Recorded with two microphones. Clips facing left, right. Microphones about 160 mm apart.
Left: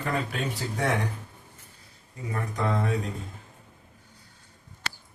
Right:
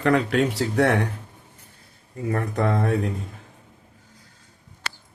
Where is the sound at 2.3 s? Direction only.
60° right (ahead or behind).